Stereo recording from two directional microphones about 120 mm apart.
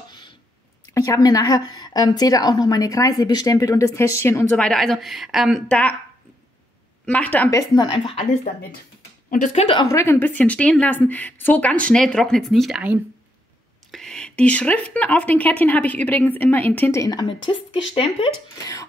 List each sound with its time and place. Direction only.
0.9 s a woman's voice: 25° left (ahead or behind)
4.5 s a woman's voice: 5° left (ahead or behind)
5.7 s speech: 10° left (ahead or behind)
7.1 s speech: 15° left (ahead or behind)
7.5 s speech: 35° left (ahead or behind)
9.4 s a woman's voice: 75° left (ahead or behind)
9.8 s speech: 20° left (ahead or behind); by 12.8 s centre (ahead or behind)
13.9 s speech: 5° left (ahead or behind)
17.0 s speech: 35° left (ahead or behind)